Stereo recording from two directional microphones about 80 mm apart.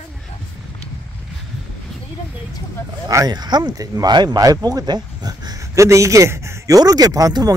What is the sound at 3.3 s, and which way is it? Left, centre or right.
Speech, right.